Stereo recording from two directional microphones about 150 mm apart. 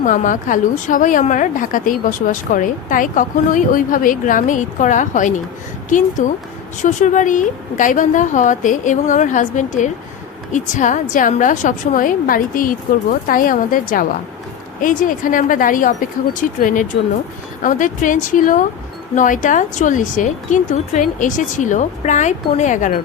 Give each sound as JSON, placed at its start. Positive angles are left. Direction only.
{"t": 0.0, "sound": "a woman's voice", "side_deg": 60}